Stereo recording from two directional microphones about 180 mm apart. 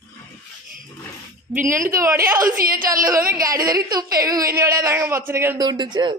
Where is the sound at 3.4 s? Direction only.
20° right (ahead or behind).